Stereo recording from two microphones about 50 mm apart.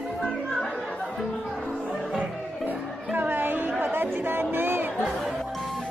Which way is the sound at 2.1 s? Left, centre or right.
Right.